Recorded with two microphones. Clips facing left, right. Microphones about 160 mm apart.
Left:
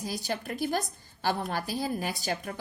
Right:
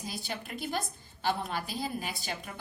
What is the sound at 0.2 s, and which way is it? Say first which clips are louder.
Speech: left 6 dB; 45° left (ahead or behind).